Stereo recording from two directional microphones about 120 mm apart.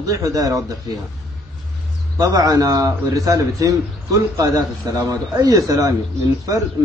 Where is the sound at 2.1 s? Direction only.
30° right (ahead or behind).